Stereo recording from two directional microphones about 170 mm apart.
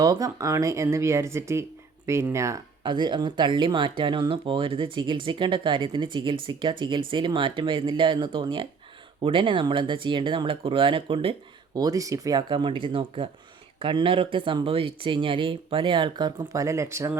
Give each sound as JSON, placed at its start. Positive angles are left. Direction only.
{"t": 0.0, "sound": "speech", "side_deg": -20}